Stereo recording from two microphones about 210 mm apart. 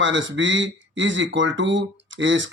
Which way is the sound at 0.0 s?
60° right (ahead or behind).